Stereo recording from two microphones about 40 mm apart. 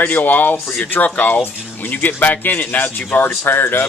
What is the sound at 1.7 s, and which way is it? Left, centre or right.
Speech, left.